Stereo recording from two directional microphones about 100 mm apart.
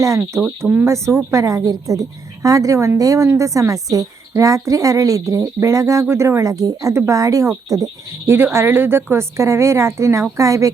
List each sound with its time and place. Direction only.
0.6 s a woman's voice: 25° right (ahead or behind)
8.5 s a woman's voice: 20° right (ahead or behind)